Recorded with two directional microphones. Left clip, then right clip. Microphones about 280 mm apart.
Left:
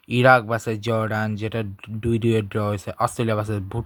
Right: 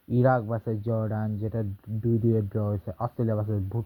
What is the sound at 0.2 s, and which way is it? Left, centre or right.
Speech, left.